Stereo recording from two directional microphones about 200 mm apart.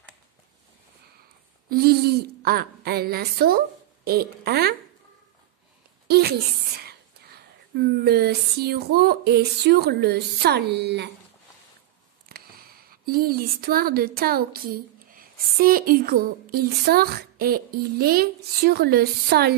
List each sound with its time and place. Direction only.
1.7 s speech: 50° right (ahead or behind)
6.0 s a woman's voice: 50° right (ahead or behind)
12.3 s speech: 50° right (ahead or behind)